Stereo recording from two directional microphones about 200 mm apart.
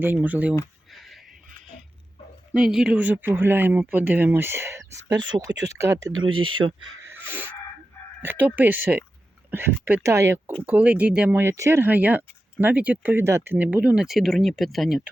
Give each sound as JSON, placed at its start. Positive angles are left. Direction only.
{"t": 0.0, "sound": "speech", "side_deg": -10}
{"t": 2.5, "sound": "speech", "side_deg": -5}
{"t": 7.1, "sound": "dog", "side_deg": -10}
{"t": 8.2, "sound": "speech", "side_deg": -10}